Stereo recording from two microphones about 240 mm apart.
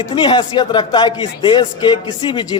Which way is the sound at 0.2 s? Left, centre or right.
Centre.